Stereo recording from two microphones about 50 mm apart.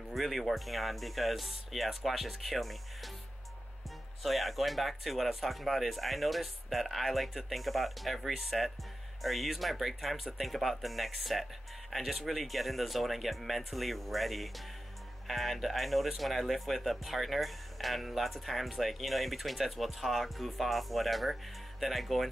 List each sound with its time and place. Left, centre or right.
0.1 s speech: centre
4.2 s speech: centre